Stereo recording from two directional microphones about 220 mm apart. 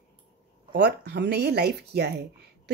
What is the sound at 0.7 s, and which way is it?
Speech, 50° right (ahead or behind).